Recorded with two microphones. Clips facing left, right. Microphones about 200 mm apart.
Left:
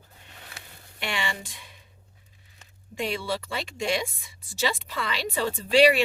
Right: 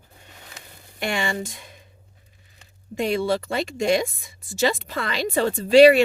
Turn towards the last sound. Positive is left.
turn(degrees=-45)  # may be behind; listen again after turning